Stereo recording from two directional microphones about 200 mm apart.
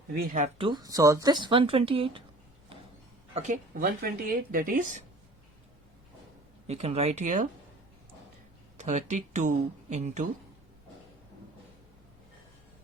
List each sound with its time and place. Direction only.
0.1 s speech: 40° right (ahead or behind)
0.6 s speech: 20° right (ahead or behind)
3.3 s speech: 40° right (ahead or behind)
6.7 s speech: 30° right (ahead or behind)
8.8 s speech: 35° right (ahead or behind)